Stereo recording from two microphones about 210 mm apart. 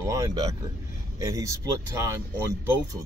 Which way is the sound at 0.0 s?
15° right (ahead or behind).